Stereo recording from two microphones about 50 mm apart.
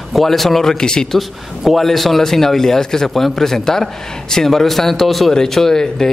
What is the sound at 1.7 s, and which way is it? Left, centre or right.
Speech, centre.